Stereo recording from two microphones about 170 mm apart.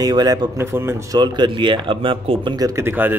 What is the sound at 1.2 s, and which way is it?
A man's voice, 25° right (ahead or behind).